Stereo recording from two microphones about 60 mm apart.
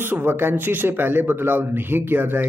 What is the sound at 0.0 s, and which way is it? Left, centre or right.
Speech, right.